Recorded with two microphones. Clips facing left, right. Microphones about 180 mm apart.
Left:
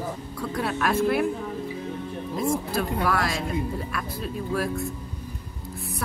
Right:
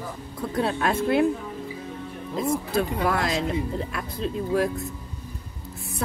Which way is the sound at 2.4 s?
20° right (ahead or behind).